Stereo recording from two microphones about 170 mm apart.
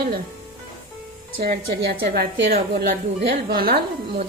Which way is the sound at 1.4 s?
65° right (ahead or behind).